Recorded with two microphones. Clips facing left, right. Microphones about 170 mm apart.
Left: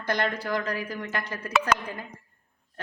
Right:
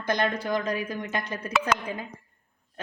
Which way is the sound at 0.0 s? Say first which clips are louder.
Right 1 dB; 20° right (ahead or behind).